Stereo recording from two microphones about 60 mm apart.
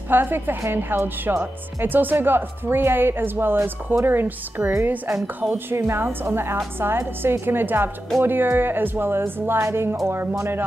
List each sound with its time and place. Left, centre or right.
0.1 s speech: right
5.2 s speech: right